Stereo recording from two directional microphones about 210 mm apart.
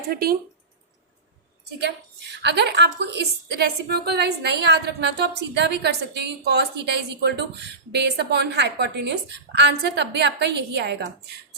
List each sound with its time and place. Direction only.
0.1 s a woman's voice: 45° right (ahead or behind)
2.4 s a woman's voice: 55° right (ahead or behind)